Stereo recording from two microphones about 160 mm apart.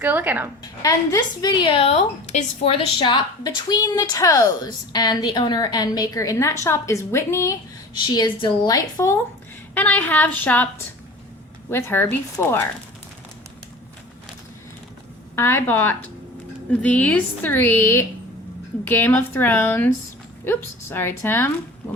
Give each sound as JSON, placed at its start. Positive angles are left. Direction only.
{"t": 0.0, "sound": "a woman's voice", "side_deg": -10}
{"t": 0.8, "sound": "a woman's voice", "side_deg": 20}
{"t": 11.7, "sound": "a woman's voice", "side_deg": 15}
{"t": 15.4, "sound": "a woman's voice", "side_deg": 15}